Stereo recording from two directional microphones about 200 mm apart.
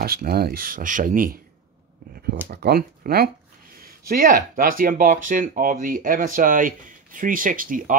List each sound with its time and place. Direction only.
0.0 s speech: 50° right (ahead or behind)
2.5 s speech: 50° right (ahead or behind)